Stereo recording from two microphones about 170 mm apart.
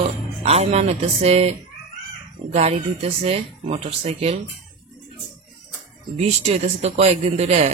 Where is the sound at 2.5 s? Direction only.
40° right (ahead or behind).